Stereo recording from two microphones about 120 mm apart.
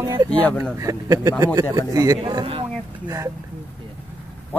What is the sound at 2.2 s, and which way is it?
Speech, 45° right (ahead or behind).